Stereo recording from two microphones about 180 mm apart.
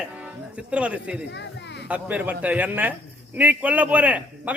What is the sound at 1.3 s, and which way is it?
Children playing, 75° left (ahead or behind).